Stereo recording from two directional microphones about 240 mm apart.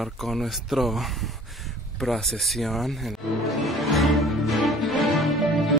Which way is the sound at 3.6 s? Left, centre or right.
Centre.